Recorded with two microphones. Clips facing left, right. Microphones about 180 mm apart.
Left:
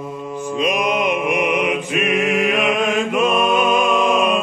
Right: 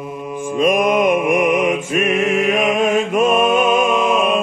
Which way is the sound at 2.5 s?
45° right (ahead or behind).